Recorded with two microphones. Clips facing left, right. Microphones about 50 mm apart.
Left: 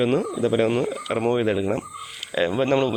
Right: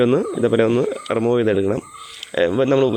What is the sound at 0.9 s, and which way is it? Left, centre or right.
Speech, centre.